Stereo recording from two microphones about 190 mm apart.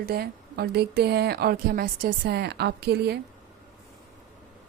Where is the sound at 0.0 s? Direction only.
55° right (ahead or behind).